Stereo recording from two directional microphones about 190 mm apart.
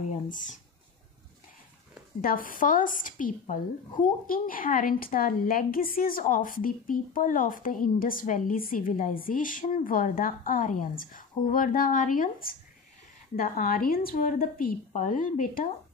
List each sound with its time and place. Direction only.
0.3 s a woman's voice: 45° left (ahead or behind)
2.2 s a woman's voice: 45° left (ahead or behind)